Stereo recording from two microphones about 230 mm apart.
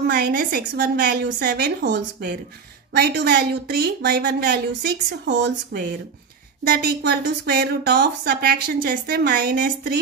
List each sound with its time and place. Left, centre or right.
0.0 s a woman's voice: right